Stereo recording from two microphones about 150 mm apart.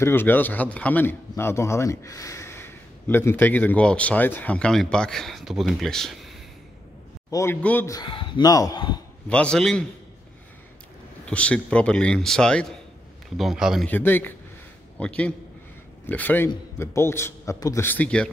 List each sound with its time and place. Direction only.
0.0 s a man's voice: 15° left (ahead or behind)
7.2 s a man's voice: 20° left (ahead or behind)
7.9 s speech: 30° left (ahead or behind)
9.3 s a man's voice: 5° left (ahead or behind)
11.2 s a man's voice: 10° left (ahead or behind)
13.8 s a man's voice: 15° left (ahead or behind)